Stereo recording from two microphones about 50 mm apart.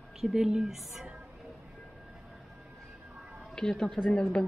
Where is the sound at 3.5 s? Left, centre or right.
Centre.